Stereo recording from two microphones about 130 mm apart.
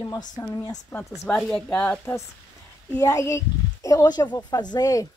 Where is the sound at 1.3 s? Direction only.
10° left (ahead or behind).